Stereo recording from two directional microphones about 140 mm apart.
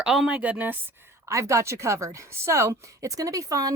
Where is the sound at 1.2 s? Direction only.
20° right (ahead or behind).